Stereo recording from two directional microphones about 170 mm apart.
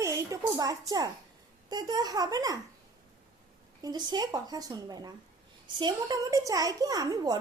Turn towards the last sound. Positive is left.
turn(degrees=-20)  # may be behind; listen again after turning